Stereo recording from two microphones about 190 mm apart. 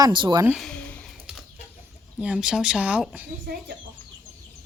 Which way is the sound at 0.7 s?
5° left (ahead or behind).